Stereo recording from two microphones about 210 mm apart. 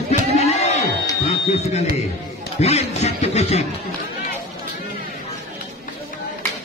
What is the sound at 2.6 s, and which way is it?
Speech, 30° left (ahead or behind).